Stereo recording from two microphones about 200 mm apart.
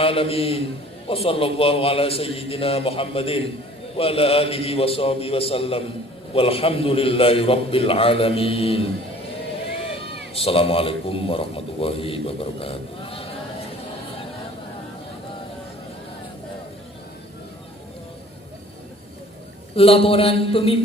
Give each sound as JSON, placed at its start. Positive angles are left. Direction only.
{"t": 0.0, "sound": "a man's voice", "side_deg": 30}
{"t": 10.3, "sound": "a man's voice", "side_deg": 30}
{"t": 19.7, "sound": "a man's voice", "side_deg": 30}